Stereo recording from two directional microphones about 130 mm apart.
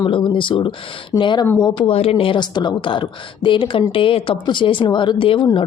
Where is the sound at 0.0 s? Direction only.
40° left (ahead or behind).